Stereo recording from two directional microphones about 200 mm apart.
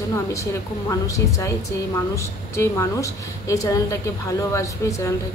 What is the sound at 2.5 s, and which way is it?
A woman's voice, 15° left (ahead or behind).